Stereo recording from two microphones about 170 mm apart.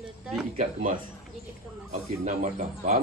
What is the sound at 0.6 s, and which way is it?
Speech, 45° right (ahead or behind).